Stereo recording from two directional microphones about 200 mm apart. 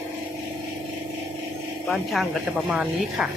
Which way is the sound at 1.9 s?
Centre (ahead or behind).